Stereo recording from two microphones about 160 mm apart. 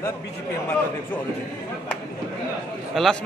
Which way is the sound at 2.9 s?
Centre (ahead or behind).